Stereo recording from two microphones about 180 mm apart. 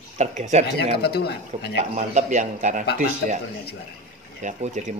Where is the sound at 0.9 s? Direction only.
60° left (ahead or behind).